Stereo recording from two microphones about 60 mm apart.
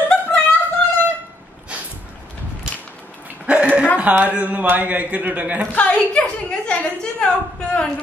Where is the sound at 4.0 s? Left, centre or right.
Right.